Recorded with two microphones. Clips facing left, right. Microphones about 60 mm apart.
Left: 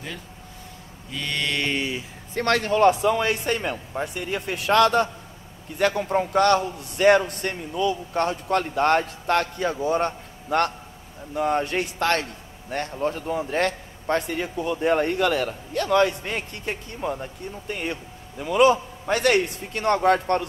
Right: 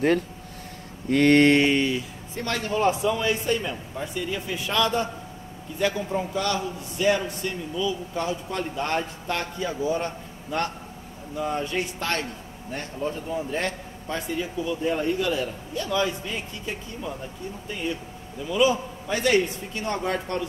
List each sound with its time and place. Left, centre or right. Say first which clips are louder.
1.0 s mantra: right 12 dB; right
2.3 s a man's voice: left 5 dB; left